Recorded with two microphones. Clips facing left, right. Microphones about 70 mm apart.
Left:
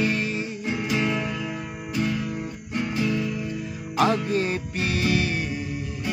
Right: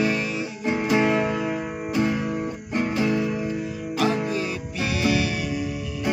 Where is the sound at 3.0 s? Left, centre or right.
Right.